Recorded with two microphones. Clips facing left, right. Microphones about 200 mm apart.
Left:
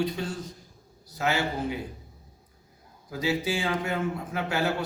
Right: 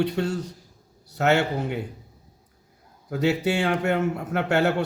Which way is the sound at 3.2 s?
65° right (ahead or behind).